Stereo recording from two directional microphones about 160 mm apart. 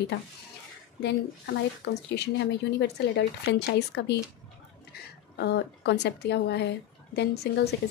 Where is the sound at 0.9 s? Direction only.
90° left.